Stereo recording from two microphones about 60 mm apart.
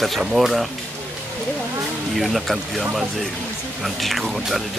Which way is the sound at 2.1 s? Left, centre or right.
Centre.